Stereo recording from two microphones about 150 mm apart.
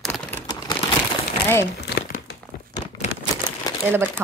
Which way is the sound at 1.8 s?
90° left.